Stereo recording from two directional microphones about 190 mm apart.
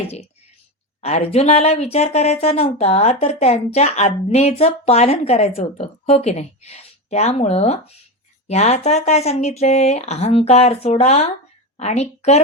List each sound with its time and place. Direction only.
1.0 s a woman's voice: 35° left (ahead or behind)